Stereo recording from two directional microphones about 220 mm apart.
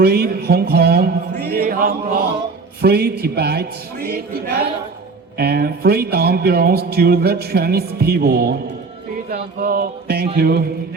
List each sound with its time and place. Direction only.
0.0 s music: 45° right (ahead or behind)